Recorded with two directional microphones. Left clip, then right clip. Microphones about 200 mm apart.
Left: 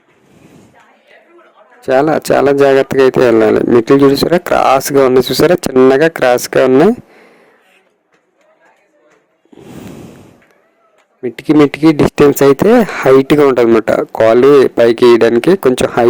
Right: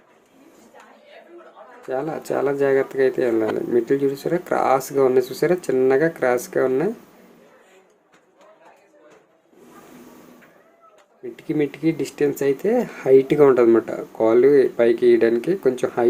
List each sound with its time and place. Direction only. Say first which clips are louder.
1.9 s speech: left 15 dB; 60° left (ahead or behind)
11.2 s speech: left 14 dB; 55° left (ahead or behind)